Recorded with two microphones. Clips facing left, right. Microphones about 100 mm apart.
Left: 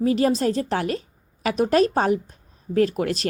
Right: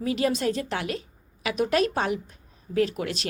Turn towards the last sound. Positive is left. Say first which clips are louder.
# left 5 dB
turn(degrees=40)  # may be behind; listen again after turning